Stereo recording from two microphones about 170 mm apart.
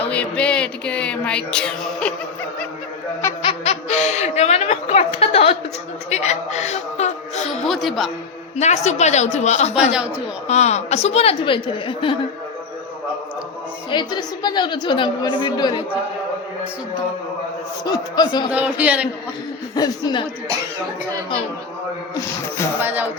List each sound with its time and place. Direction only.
0.0 s a sound: 5° left (ahead or behind)
3.4 s snicker: 35° left (ahead or behind)
6.1 s music: 40° left (ahead or behind)
7.6 s speech: centre (ahead or behind)
8.5 s a woman's voice: 40° left (ahead or behind)
13.9 s a woman's voice: 25° left (ahead or behind)
17.8 s a woman's voice: 25° left (ahead or behind)
18.5 s speech: 10° right (ahead or behind)
19.7 s a woman's voice: 25° left (ahead or behind)
22.1 s speech: 15° left (ahead or behind)
22.8 s speech: 10° right (ahead or behind)